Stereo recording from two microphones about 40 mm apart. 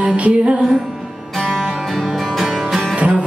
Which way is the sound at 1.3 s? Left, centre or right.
Centre.